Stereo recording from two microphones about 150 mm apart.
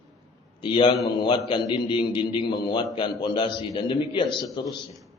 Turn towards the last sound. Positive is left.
turn(degrees=30)  # may be behind; listen again after turning